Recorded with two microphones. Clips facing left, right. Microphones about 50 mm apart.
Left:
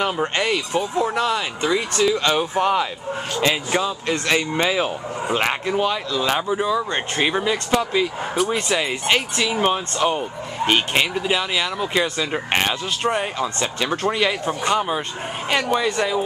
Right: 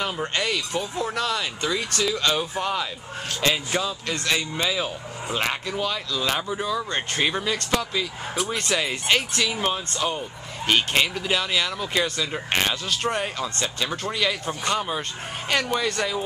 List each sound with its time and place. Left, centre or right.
0.0 s speech: left
6.5 s speech: centre
9.9 s speech: left
10.9 s speech: centre
14.6 s speech: centre